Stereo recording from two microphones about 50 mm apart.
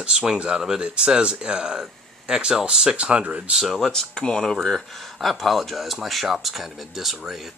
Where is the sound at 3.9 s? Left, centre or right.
Centre.